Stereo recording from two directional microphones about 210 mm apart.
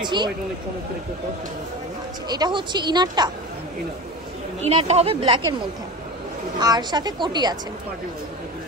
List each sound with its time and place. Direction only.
0.0 s speech: 20° right (ahead or behind)
2.2 s speech: 20° right (ahead or behind)
4.6 s speech: 30° right (ahead or behind)
6.6 s speech: 20° right (ahead or behind)